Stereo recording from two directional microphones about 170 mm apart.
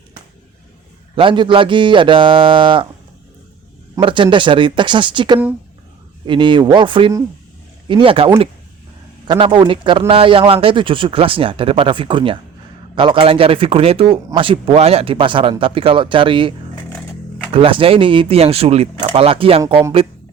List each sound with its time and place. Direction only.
1.1 s speech: 30° right (ahead or behind)
4.0 s speech: 30° right (ahead or behind)
16.9 s a sound: centre (ahead or behind)
17.5 s speech: 30° right (ahead or behind)